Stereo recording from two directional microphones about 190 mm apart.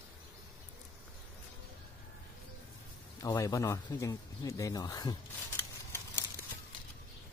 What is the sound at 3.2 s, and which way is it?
Speech, 20° left (ahead or behind).